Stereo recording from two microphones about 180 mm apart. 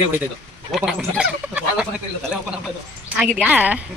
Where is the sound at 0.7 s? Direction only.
Centre (ahead or behind).